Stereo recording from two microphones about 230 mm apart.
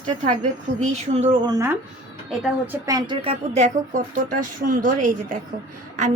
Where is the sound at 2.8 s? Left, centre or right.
Centre; by 5.4 s right.